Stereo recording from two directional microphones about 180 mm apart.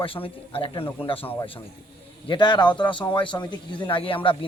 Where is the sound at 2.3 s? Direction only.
25° left (ahead or behind).